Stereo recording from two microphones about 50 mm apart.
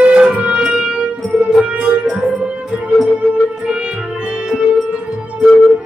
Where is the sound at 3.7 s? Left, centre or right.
Right.